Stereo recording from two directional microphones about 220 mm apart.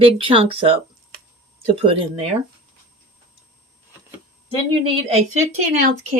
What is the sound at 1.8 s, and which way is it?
Speech, 25° right (ahead or behind).